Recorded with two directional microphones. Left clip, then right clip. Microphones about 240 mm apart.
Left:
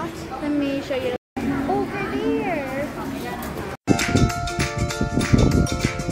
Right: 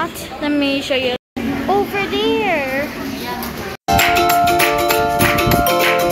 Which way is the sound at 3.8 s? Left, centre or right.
Right.